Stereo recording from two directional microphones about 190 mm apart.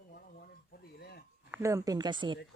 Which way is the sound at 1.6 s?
15° right (ahead or behind).